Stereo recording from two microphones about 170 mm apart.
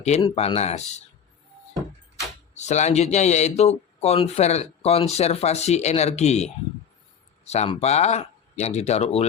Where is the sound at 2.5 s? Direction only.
45° left (ahead or behind).